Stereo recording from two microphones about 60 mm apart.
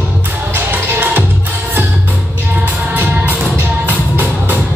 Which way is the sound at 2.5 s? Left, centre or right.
Right.